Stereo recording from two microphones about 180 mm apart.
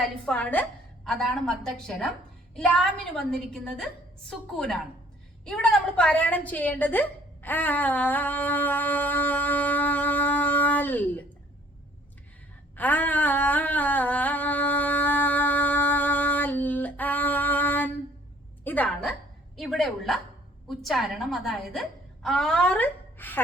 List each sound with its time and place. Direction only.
0.0 s a woman's voice: 5° left (ahead or behind)
3.2 s a woman's voice: 5° left (ahead or behind)
12.7 s a sound: 10° left (ahead or behind)
19.5 s a woman's voice: centre (ahead or behind)